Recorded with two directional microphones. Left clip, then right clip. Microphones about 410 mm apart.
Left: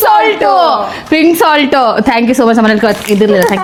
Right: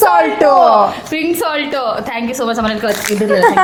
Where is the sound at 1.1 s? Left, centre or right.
Left.